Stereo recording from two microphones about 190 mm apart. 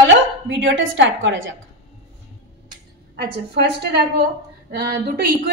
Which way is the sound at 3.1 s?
55° right (ahead or behind).